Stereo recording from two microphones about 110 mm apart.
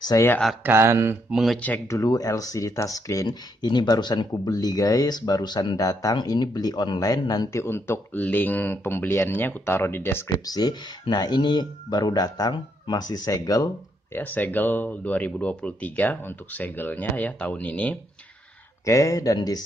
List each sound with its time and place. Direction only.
0.1 s speech: 30° left (ahead or behind)
0.7 s speech: 25° right (ahead or behind)
1.3 s speech: centre (ahead or behind)
1.9 s speech: 30° left (ahead or behind)
7.5 s speech: 20° left (ahead or behind)
10.4 s speech: 35° left (ahead or behind)
14.1 s speech: 15° left (ahead or behind)
18.9 s speech: 30° left (ahead or behind)